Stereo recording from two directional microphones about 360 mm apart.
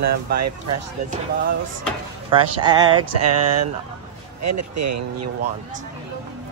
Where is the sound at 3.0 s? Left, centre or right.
Right.